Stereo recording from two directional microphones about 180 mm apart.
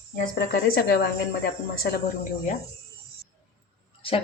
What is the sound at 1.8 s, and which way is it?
Speech, 50° left (ahead or behind).